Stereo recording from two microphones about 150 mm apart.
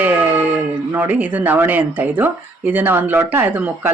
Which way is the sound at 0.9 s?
10° right (ahead or behind).